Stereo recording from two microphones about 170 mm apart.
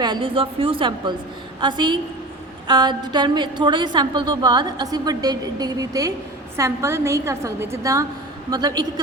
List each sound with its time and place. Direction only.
0.0 s a woman's voice: 30° right (ahead or behind)